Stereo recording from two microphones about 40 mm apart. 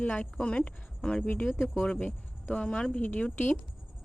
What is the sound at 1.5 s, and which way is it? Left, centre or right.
Speech, centre.